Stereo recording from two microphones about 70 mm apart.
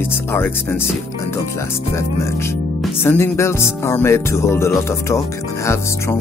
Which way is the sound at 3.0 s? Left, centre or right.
Left.